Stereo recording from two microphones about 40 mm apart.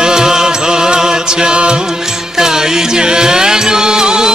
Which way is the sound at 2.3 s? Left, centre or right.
Centre.